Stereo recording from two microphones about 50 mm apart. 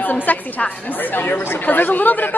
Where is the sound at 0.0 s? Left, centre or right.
Left.